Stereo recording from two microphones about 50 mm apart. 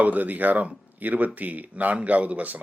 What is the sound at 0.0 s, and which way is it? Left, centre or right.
Speech, right.